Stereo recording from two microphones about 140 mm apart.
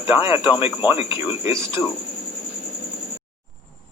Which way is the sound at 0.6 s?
45° left (ahead or behind).